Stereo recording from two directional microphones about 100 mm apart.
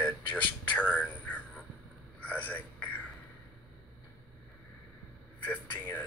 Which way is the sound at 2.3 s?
15° left (ahead or behind).